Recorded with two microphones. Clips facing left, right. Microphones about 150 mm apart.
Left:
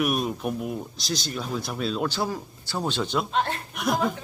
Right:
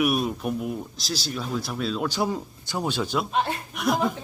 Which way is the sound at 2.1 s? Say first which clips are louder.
Right 2 dB; 20° right (ahead or behind).